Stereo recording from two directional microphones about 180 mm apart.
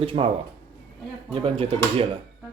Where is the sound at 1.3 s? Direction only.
30° right (ahead or behind).